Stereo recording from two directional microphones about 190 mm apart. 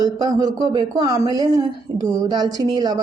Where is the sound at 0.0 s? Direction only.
20° right (ahead or behind).